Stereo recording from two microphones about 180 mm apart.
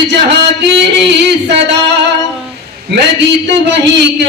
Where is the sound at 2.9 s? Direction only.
70° right (ahead or behind).